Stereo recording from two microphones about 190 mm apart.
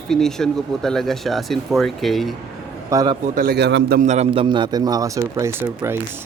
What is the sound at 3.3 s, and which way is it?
Speech, 55° right (ahead or behind).